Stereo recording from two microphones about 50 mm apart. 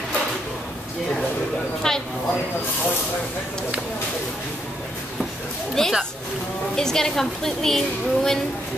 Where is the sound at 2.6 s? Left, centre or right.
Left.